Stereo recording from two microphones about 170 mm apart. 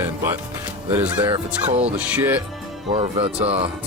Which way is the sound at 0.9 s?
10° right (ahead or behind).